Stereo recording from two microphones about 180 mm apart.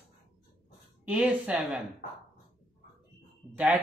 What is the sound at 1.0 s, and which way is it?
Speech, 5° right (ahead or behind).